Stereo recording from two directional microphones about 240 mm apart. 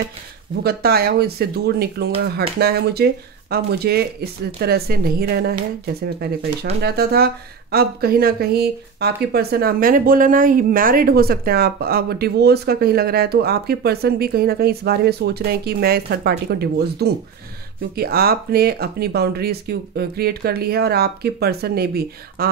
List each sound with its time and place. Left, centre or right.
0.7 s speech: right